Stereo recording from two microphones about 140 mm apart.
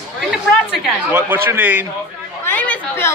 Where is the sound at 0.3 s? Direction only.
5° right (ahead or behind).